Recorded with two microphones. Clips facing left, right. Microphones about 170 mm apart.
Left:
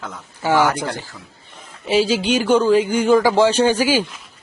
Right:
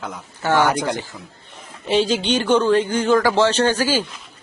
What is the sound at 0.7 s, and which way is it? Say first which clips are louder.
Speech: right 1 dB; 15° right (ahead or behind).